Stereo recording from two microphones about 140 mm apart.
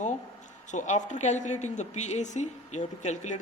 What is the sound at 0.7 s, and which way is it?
Speech, 60° left (ahead or behind).